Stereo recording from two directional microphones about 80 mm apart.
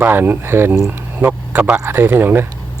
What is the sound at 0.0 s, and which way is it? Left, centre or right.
Speech, right.